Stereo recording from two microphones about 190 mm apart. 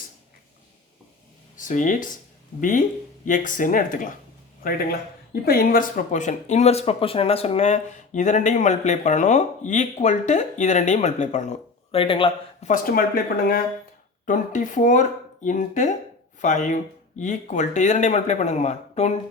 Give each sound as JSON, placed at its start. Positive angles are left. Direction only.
{"t": 1.5, "sound": "speech", "side_deg": 45}
{"t": 12.6, "sound": "speech", "side_deg": 45}
{"t": 14.3, "sound": "speech", "side_deg": 40}